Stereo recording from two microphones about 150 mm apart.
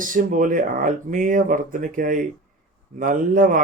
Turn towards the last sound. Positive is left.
turn(degrees=-65)  # may be behind; listen again after turning